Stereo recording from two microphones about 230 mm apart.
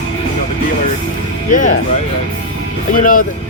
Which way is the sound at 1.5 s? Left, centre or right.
Left.